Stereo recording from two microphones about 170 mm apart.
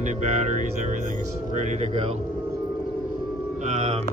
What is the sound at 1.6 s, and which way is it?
Speech, 45° right (ahead or behind).